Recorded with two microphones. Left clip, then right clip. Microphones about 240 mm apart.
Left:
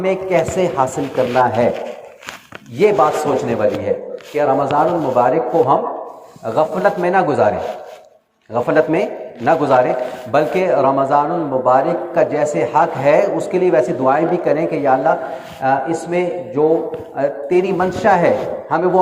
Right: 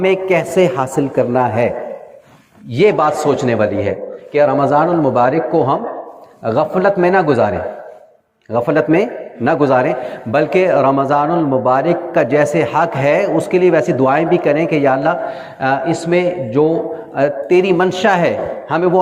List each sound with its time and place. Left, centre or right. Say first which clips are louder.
0.0 s a man's voice: right 2 dB; right
2.7 s a man's voice: right 1 dB; right
8.5 s a man's voice: right 1 dB; right